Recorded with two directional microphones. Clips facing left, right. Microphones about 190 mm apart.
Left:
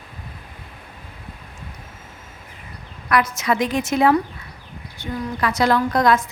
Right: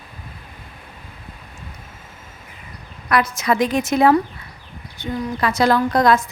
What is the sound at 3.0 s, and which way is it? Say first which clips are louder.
A woman's voice: right 1 dB; 30° right (ahead or behind).